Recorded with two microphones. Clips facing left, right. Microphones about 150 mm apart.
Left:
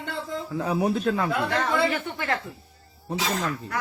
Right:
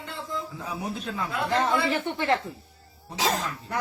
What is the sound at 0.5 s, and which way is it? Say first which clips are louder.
Speech: left 9 dB; 65° left (ahead or behind).